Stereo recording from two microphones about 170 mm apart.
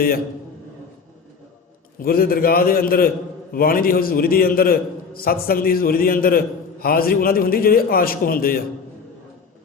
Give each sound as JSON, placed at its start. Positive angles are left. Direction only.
{"t": 2.0, "sound": "a man's voice", "side_deg": 60}